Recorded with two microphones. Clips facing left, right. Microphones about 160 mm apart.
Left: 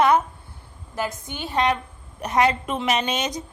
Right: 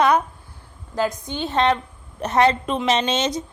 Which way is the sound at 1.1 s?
20° right (ahead or behind).